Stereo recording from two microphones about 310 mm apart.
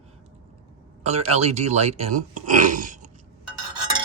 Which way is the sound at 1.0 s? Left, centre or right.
Right.